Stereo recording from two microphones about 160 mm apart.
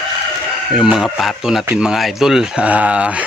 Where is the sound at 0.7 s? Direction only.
5° right (ahead or behind).